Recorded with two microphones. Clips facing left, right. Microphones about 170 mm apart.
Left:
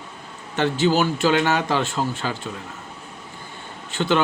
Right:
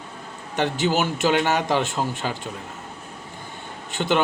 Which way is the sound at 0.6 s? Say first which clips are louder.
Left 3 dB; 20° right (ahead or behind).